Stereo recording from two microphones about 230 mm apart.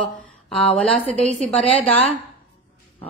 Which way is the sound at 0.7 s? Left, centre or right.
Centre.